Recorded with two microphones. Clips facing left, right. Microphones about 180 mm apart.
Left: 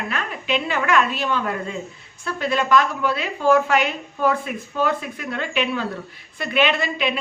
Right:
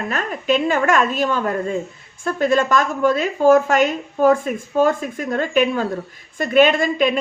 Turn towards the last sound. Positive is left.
turn(degrees=-45)  # may be behind; listen again after turning